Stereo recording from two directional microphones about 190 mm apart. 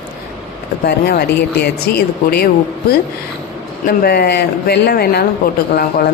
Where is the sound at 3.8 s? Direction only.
55° left (ahead or behind).